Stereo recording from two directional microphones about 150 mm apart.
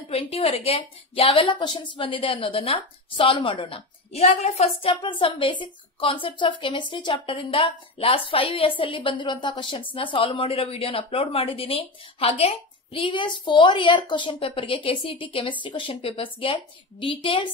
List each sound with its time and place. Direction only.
0.1 s a woman's voice: 40° left (ahead or behind)